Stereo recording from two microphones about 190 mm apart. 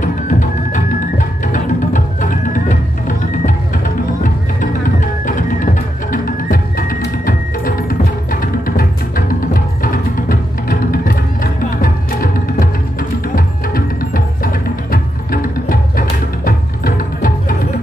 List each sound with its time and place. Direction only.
0.0 s music: 45° left (ahead or behind)